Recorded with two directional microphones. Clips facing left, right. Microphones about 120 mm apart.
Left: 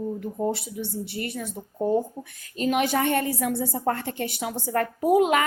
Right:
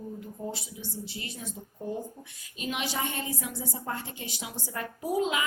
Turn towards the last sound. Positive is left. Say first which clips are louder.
# left 9 dB
turn(degrees=60)  # may be behind; listen again after turning